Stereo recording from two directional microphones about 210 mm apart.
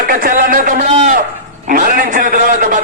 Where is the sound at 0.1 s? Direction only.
40° right (ahead or behind).